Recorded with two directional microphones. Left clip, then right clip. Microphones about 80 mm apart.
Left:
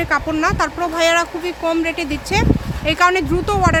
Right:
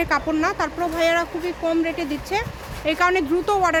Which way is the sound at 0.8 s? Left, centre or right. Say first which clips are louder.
Left 4 dB; left.